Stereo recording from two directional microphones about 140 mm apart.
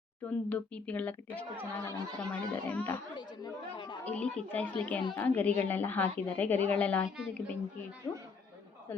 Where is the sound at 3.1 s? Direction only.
30° left (ahead or behind).